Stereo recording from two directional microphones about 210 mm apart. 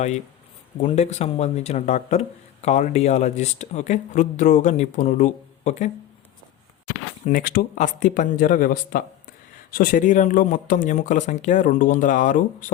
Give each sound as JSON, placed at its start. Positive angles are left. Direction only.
{"t": 0.8, "sound": "speech", "side_deg": 30}
{"t": 7.3, "sound": "speech", "side_deg": 40}